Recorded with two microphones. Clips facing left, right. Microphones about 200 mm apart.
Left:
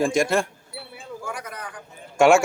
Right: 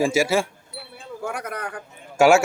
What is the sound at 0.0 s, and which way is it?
Speech, 5° right (ahead or behind).